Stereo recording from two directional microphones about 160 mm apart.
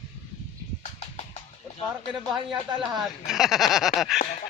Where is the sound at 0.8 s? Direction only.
45° left (ahead or behind).